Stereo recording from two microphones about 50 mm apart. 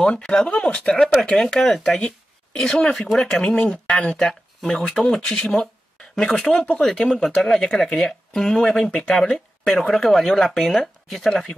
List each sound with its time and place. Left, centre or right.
0.2 s speech: centre
2.0 s a sound: centre
2.7 s speech: centre
3.5 s speech: left